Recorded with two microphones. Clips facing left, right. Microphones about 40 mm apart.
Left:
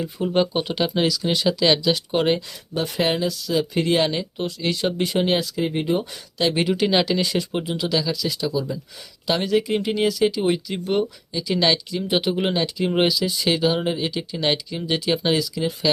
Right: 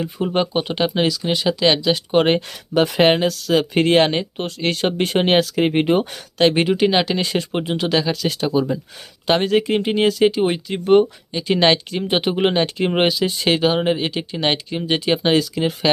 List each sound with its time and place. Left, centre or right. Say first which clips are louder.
0.0 s speech: right 1 dB; right
3.0 s speech: right 4 dB; right
6.4 s speech: right 5 dB; right
7.2 s speech: right 2 dB; right